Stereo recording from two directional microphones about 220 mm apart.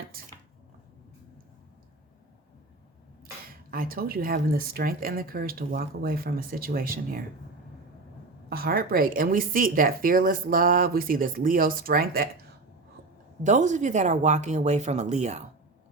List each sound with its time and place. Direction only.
3.7 s a woman's voice: 40° right (ahead or behind)
8.4 s a woman's voice: 45° right (ahead or behind)
13.4 s a woman's voice: 35° right (ahead or behind)